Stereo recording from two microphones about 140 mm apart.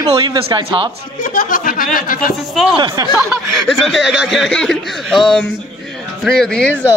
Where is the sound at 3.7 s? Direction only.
Centre (ahead or behind).